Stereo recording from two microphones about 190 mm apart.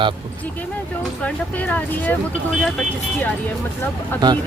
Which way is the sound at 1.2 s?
5° left (ahead or behind).